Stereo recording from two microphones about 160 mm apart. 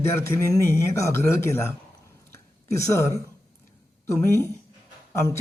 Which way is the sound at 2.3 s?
15° left (ahead or behind).